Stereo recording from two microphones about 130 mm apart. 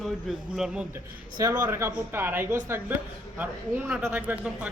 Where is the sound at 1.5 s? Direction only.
15° right (ahead or behind).